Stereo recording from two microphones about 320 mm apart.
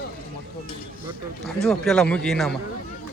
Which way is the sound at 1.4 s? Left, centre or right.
Centre.